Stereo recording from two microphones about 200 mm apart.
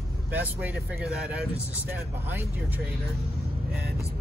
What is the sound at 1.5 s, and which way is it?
Speech, 15° left (ahead or behind).